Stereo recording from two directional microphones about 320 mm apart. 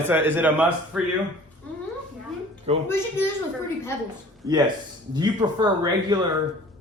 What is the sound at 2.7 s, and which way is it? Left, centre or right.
Speech, centre.